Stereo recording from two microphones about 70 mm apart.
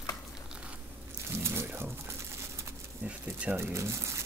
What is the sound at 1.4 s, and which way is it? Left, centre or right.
Crumpling, right.